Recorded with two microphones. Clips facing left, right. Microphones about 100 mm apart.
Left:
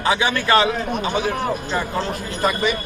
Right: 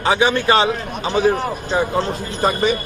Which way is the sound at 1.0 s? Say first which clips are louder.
Right 4 dB; 35° right (ahead or behind).